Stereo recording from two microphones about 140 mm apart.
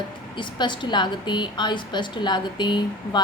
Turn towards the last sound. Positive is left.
turn(degrees=35)  # may be behind; listen again after turning